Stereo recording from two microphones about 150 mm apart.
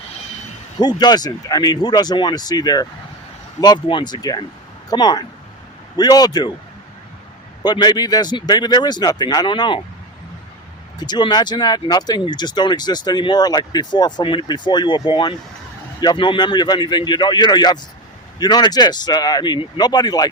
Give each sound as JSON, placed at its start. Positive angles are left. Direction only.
{"t": 0.8, "sound": "speech", "side_deg": 30}
{"t": 7.6, "sound": "speech", "side_deg": 30}
{"t": 11.0, "sound": "speech", "side_deg": 30}